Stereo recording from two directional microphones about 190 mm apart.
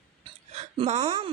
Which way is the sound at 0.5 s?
35° right (ahead or behind).